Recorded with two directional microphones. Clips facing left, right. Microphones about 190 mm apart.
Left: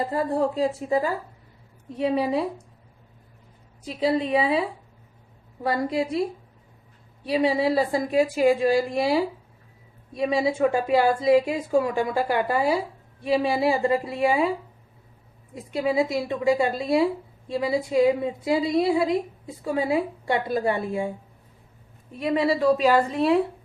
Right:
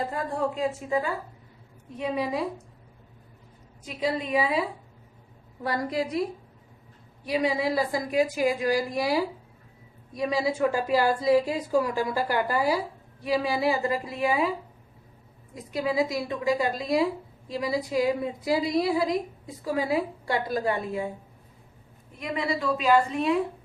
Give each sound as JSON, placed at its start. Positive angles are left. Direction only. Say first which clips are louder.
{"t": 0.1, "sound": "a woman's voice", "louder": "left 5 dB", "side_deg": 35}
{"t": 2.1, "sound": "a woman's voice", "louder": "left 4 dB", "side_deg": 30}
{"t": 3.8, "sound": "a woman's voice", "louder": "left 5 dB", "side_deg": 30}
{"t": 5.6, "sound": "a woman's voice", "louder": "left 3 dB", "side_deg": 25}
{"t": 7.3, "sound": "a woman's voice", "louder": "left 4 dB", "side_deg": 30}
{"t": 15.5, "sound": "a woman's voice", "louder": "left 3 dB", "side_deg": 25}
{"t": 22.2, "sound": "a woman's voice", "louder": "left 7 dB", "side_deg": 35}